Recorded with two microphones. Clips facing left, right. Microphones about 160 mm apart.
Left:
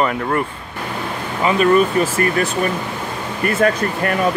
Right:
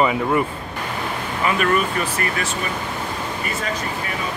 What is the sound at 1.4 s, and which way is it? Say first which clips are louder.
Speech: left 6 dB; 30° left (ahead or behind).